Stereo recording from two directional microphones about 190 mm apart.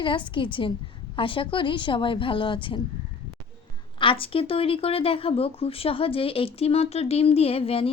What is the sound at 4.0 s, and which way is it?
A woman's voice, 25° left (ahead or behind).